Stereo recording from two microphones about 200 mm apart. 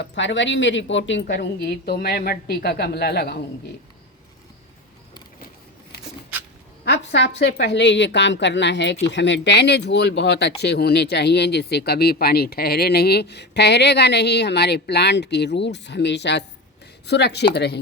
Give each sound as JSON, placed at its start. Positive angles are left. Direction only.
{"t": 0.0, "sound": "speech", "side_deg": 65}
{"t": 6.8, "sound": "a woman's voice", "side_deg": 60}